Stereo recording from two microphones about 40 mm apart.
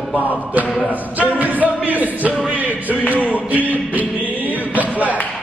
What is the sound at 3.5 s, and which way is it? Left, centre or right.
Music, right.